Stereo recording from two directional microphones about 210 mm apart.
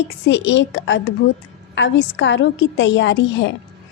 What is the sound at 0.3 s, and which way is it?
A woman's voice, 60° left (ahead or behind).